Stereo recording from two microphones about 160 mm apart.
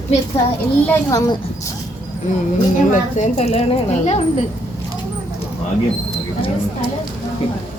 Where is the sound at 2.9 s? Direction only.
45° left (ahead or behind).